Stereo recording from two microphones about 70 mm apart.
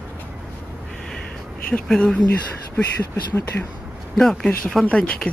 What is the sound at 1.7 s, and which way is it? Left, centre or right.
Speech, centre.